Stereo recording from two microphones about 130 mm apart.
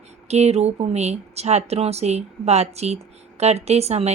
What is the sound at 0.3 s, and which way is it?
Speech, 55° right (ahead or behind).